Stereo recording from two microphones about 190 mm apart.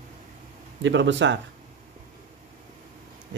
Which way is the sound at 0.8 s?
70° right (ahead or behind).